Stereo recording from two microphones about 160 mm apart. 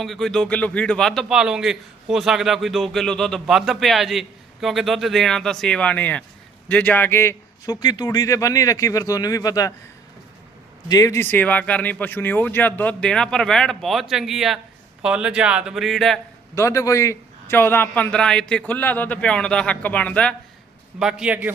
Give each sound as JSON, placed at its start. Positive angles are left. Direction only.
{"t": 0.0, "sound": "a man's voice", "side_deg": 0}
{"t": 10.8, "sound": "speech", "side_deg": 20}
{"t": 16.6, "sound": "speech", "side_deg": 20}
{"t": 21.0, "sound": "speech", "side_deg": -5}